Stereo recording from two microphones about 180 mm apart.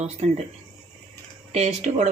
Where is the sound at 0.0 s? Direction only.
40° right (ahead or behind).